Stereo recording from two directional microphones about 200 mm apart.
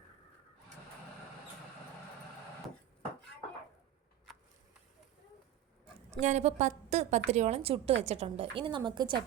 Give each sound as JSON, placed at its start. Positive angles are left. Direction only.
{"t": 6.1, "sound": "a woman's voice", "side_deg": -35}